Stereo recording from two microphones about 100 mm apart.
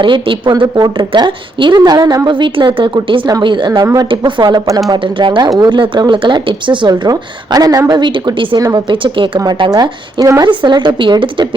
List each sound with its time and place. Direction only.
0.0 s a woman's voice: 55° right (ahead or behind)
8.5 s speech: 40° right (ahead or behind)
8.9 s a woman's voice: 55° right (ahead or behind)
9.4 s speech: 40° right (ahead or behind)
10.5 s a woman's voice: 50° right (ahead or behind)